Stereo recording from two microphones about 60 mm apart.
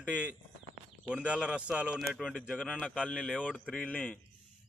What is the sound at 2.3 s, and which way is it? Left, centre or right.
Speech, centre.